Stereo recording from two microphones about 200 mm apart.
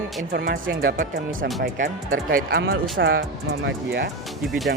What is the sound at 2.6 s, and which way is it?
Speech, 70° right (ahead or behind).